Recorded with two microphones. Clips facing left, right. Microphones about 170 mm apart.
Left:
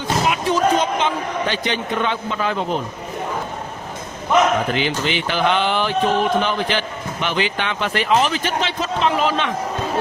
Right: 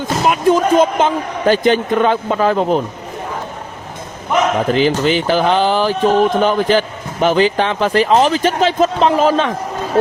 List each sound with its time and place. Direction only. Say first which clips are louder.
0.0 s speech: right 6 dB; 45° right (ahead or behind)
4.7 s speech: right 8 dB; 40° right (ahead or behind)